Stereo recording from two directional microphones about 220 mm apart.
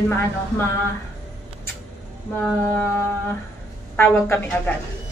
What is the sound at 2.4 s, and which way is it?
A woman's voice, 10° left (ahead or behind).